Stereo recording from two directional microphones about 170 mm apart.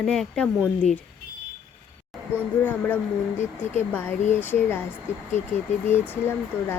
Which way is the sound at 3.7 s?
10° left (ahead or behind).